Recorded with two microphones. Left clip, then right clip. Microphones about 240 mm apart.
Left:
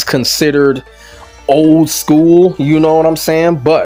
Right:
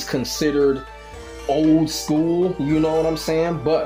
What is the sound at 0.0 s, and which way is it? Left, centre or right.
Speech, left.